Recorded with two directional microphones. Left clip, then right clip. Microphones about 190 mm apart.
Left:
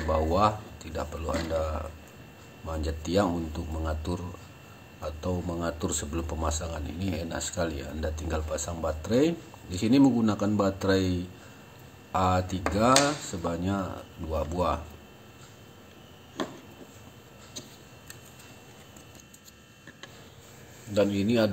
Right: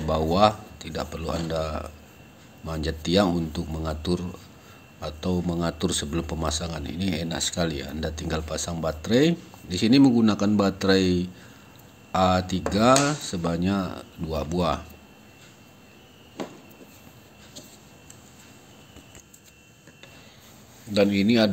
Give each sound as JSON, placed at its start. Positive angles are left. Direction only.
{"t": 0.1, "sound": "speech", "side_deg": -25}
{"t": 3.0, "sound": "speech", "side_deg": -25}
{"t": 20.9, "sound": "speech", "side_deg": -25}